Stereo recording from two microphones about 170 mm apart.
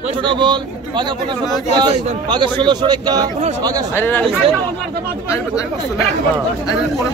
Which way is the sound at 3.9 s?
10° left (ahead or behind).